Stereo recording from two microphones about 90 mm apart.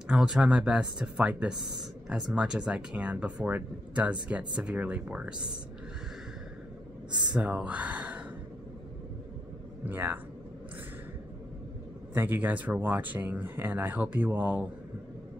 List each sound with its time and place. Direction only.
0.1 s speech: 10° right (ahead or behind)
7.2 s speech: 15° right (ahead or behind)
9.8 s speech: 20° right (ahead or behind)
12.1 s speech: 20° right (ahead or behind)